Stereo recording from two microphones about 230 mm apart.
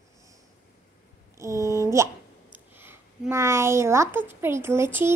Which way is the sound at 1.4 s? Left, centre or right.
Centre.